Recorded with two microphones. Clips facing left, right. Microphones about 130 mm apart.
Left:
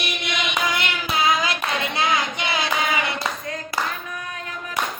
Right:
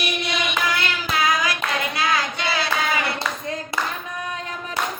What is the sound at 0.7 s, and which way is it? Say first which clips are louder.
Child singing: right 1 dB; 20° left (ahead or behind).